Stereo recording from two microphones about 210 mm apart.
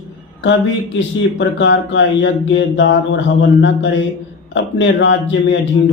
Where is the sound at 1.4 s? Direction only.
60° left (ahead or behind).